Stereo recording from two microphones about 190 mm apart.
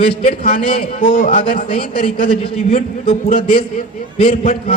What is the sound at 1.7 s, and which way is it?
A man's voice, 30° left (ahead or behind).